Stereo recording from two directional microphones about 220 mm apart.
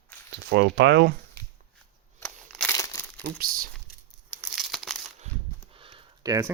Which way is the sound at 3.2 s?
40° right (ahead or behind).